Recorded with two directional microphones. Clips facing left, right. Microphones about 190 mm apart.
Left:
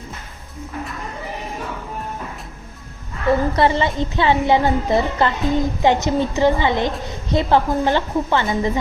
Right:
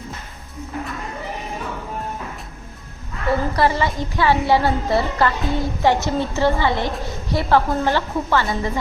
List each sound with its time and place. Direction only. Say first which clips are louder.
3.5 s a woman's voice: left 2 dB; 20° left (ahead or behind)